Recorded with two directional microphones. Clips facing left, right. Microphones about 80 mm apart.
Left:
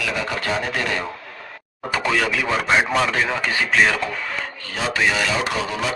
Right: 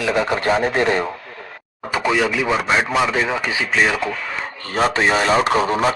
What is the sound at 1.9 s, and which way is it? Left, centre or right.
Speech, centre.